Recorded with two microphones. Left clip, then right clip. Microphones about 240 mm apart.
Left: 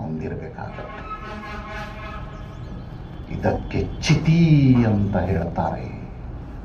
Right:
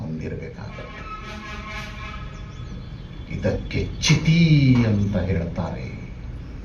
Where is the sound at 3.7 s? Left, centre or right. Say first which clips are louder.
Right 1 dB; right.